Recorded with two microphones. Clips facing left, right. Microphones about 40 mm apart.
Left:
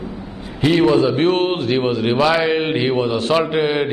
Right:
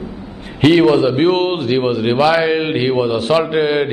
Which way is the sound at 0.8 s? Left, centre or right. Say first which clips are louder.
Right 2 dB; centre.